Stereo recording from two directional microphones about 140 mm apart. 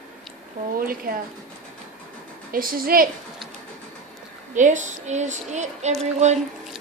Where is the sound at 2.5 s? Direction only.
90° right.